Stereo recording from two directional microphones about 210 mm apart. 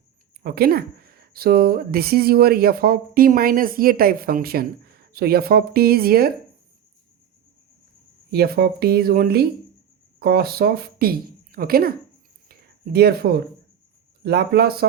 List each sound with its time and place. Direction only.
0.4 s speech: 45° right (ahead or behind)
8.3 s a woman's voice: 50° right (ahead or behind)
12.5 s a sound: 45° right (ahead or behind)
14.3 s speech: 50° right (ahead or behind)